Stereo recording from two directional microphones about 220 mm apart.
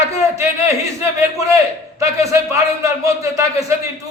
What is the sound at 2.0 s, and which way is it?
A man's voice, 15° right (ahead or behind).